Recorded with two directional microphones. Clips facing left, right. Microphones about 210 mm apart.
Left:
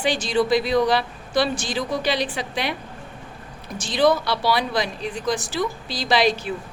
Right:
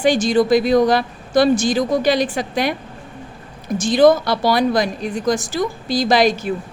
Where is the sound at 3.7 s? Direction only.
45° right (ahead or behind).